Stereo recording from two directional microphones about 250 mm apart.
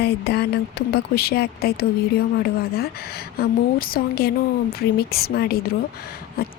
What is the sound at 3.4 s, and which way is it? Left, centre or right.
Speech, left.